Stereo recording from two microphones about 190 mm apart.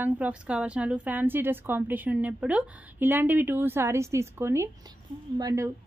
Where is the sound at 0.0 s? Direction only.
5° right (ahead or behind).